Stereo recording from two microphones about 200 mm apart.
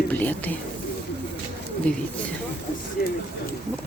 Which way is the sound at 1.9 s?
5° left (ahead or behind).